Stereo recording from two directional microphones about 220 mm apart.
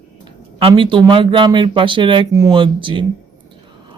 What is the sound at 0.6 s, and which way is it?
Speech, 25° right (ahead or behind).